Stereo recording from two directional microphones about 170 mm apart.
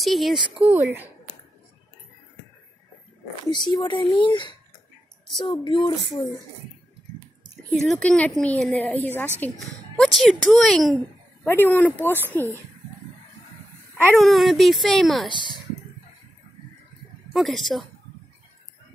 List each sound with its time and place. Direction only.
0.0 s speech: centre (ahead or behind)
0.7 s speech: 10° right (ahead or behind)
3.4 s speech: 25° left (ahead or behind)
7.7 s speech: centre (ahead or behind)
11.4 s speech: 10° left (ahead or behind)
14.1 s speech: centre (ahead or behind)
17.3 s speech: centre (ahead or behind)